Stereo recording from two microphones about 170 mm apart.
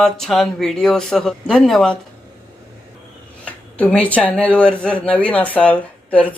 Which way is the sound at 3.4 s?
5° left (ahead or behind).